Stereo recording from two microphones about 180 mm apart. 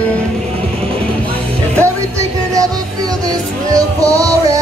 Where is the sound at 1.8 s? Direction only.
20° right (ahead or behind).